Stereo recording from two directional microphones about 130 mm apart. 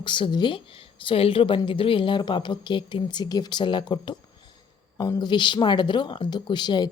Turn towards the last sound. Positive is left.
turn(degrees=35)  # may be behind; listen again after turning